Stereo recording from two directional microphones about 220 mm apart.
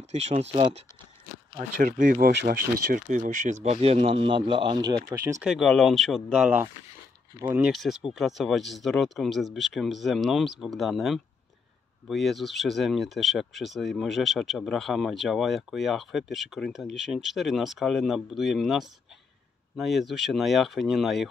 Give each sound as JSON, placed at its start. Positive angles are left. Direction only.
{"t": 0.1, "sound": "speech", "side_deg": -30}
{"t": 5.5, "sound": "speech", "side_deg": 0}